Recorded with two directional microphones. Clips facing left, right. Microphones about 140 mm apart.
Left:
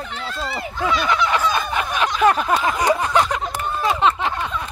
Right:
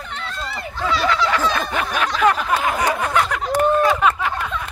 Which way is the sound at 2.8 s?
25° left (ahead or behind).